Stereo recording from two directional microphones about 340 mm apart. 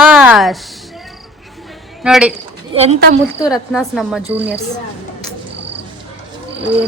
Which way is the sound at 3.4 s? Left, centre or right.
Centre.